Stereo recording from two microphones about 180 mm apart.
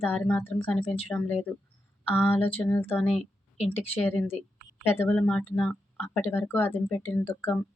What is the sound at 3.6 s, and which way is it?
Speech, 35° left (ahead or behind).